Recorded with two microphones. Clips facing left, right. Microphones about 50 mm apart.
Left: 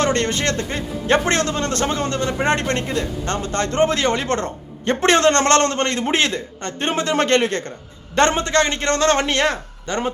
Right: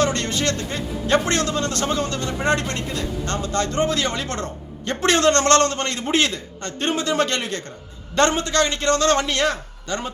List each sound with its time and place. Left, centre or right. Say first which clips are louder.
0.0 s a man's voice: left 2 dB; left